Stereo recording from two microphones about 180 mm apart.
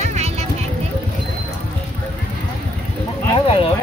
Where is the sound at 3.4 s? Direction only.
30° left (ahead or behind).